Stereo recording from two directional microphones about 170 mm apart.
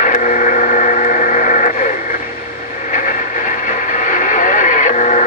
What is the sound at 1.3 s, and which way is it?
Radio, 50° left (ahead or behind).